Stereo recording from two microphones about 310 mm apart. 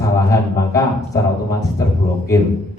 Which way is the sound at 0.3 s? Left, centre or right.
Centre.